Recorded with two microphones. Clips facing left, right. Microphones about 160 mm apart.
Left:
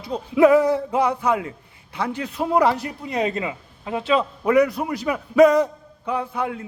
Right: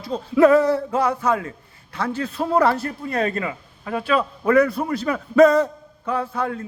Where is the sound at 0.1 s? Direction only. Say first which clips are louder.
Even; 15° left (ahead or behind).